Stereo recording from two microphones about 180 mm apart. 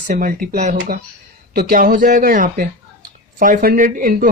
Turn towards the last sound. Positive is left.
turn(degrees=-50)  # may be behind; listen again after turning